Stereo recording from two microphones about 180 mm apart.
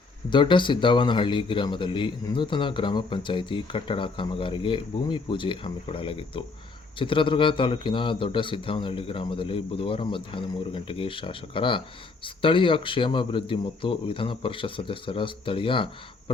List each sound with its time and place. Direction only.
0.3 s speech: 25° left (ahead or behind)